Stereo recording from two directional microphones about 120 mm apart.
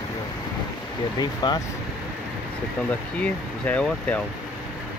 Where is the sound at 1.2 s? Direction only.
35° left (ahead or behind).